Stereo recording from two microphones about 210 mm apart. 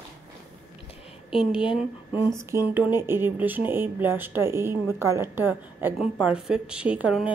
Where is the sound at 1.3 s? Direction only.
25° left (ahead or behind).